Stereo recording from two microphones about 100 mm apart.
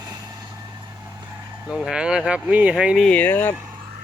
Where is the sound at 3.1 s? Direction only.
20° left (ahead or behind).